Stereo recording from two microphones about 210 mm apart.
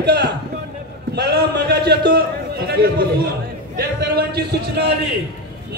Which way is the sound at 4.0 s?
50° right (ahead or behind).